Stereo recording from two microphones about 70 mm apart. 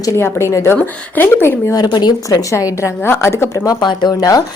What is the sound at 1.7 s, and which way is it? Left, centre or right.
Speech, left.